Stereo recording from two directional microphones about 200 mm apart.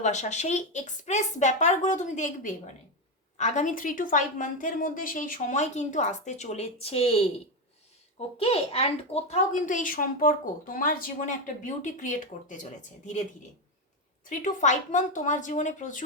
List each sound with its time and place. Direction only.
0.0 s speech: 35° left (ahead or behind)
8.4 s speech: 30° left (ahead or behind)
14.3 s speech: 40° left (ahead or behind)